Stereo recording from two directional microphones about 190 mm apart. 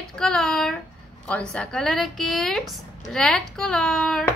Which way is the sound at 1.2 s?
5° left (ahead or behind).